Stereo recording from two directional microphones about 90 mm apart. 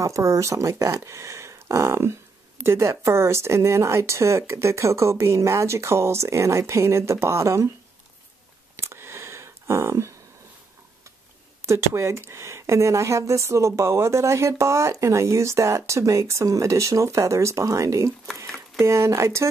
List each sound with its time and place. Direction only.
0.0 s speech: 35° right (ahead or behind)
8.7 s a sound: 30° right (ahead or behind)
11.6 s speech: 30° right (ahead or behind)